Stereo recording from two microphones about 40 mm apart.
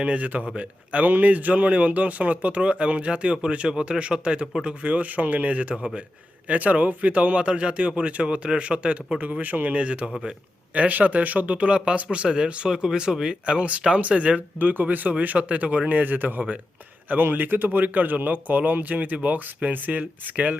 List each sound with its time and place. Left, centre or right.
0.0 s speech: right
1.0 s speech: right
4.6 s speech: right
9.4 s speech: right
9.7 s speech: right
13.4 s speech: right
14.6 s speech: right